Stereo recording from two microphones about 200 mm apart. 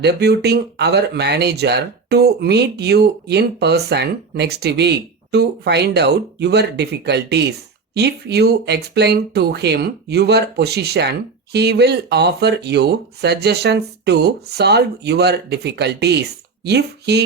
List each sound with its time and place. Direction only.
0.0 s speech: 55° right (ahead or behind)